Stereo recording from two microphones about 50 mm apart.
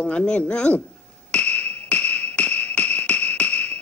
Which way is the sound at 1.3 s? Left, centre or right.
Left.